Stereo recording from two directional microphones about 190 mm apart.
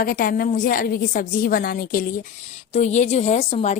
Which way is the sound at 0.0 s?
50° left (ahead or behind).